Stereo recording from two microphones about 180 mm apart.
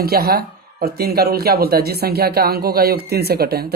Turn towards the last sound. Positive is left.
turn(degrees=-60)  # may be behind; listen again after turning